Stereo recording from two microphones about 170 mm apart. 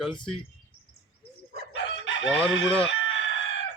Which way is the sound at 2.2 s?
30° left (ahead or behind).